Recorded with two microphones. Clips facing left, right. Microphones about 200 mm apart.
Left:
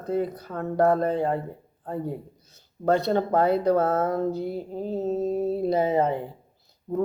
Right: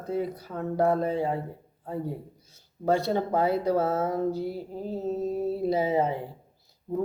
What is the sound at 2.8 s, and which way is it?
Speech, 10° right (ahead or behind).